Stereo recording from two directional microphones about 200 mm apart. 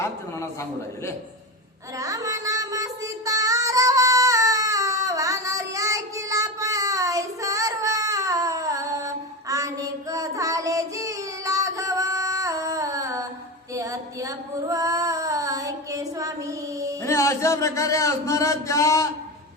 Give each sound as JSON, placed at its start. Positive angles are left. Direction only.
{"t": 0.0, "sound": "a man's voice", "side_deg": 15}
{"t": 2.0, "sound": "music", "side_deg": -15}
{"t": 13.7, "sound": "female singing", "side_deg": -15}
{"t": 17.0, "sound": "a sound", "side_deg": 15}